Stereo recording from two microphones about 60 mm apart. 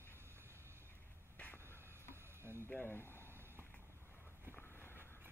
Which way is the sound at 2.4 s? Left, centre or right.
Right.